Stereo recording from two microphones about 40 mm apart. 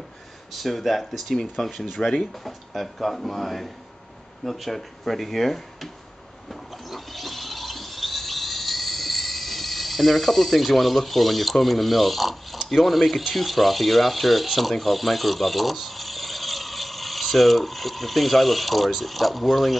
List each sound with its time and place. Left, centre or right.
0.5 s speech: centre
2.0 s speech: centre
2.4 s speech: centre
6.5 s a sound: centre
12.6 s speech: centre